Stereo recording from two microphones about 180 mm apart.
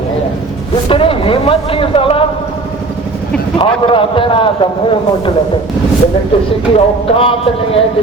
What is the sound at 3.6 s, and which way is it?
Speech, 30° left (ahead or behind).